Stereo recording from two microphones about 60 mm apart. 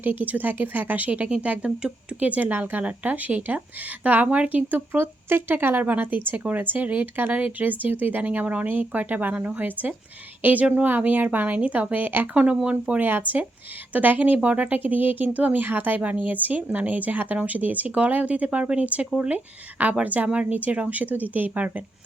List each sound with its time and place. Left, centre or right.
0.0 s speech: right